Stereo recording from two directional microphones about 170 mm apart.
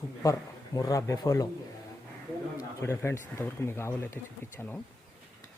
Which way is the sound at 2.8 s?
15° left (ahead or behind).